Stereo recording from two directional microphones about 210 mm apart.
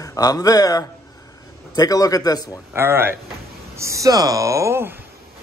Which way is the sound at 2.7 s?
10° right (ahead or behind).